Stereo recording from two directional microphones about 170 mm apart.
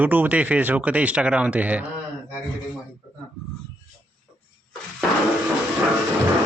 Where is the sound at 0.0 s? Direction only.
10° right (ahead or behind).